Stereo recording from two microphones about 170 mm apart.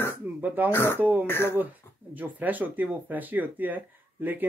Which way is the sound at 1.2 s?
15° left (ahead or behind).